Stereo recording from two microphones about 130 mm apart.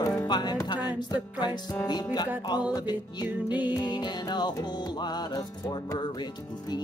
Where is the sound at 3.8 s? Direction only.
35° left (ahead or behind).